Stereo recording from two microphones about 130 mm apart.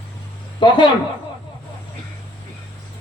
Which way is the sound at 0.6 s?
40° left (ahead or behind).